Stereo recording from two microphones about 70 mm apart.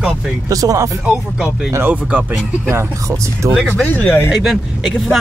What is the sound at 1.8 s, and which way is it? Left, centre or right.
Speech, right.